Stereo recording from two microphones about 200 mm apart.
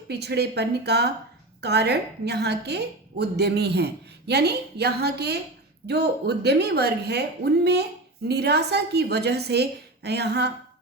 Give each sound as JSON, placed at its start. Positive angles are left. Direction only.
{"t": 0.1, "sound": "a woman's voice", "side_deg": -55}